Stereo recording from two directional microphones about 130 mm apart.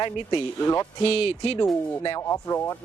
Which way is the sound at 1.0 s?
50° left (ahead or behind).